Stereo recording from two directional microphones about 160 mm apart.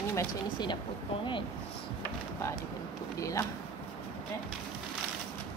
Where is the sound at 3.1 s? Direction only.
20° left (ahead or behind).